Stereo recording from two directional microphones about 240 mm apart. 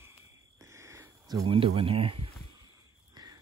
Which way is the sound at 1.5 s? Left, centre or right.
Right.